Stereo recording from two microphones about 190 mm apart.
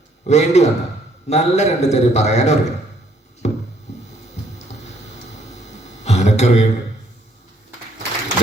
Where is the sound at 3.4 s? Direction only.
35° left (ahead or behind).